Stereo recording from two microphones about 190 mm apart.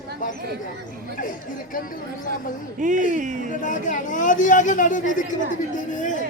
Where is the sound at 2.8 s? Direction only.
40° right (ahead or behind).